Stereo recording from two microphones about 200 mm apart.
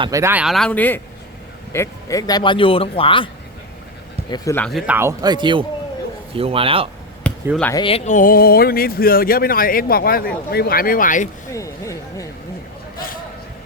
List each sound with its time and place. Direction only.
0.0 s speech: 15° right (ahead or behind); by 3.2 s 25° left (ahead or behind)
4.3 s speech: 10° left (ahead or behind)
4.9 s speech: 10° right (ahead or behind); by 6.8 s 25° right (ahead or behind)
7.3 s basketball bounce: 5° left (ahead or behind)
7.7 s speech: 25° left (ahead or behind); by 11.3 s 40° left (ahead or behind)
11.5 s speech: 15° left (ahead or behind)